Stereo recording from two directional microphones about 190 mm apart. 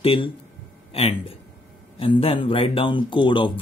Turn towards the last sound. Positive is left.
turn(degrees=25)  # may be behind; listen again after turning